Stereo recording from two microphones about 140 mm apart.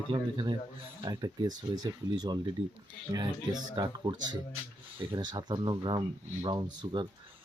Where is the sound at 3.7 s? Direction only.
30° right (ahead or behind).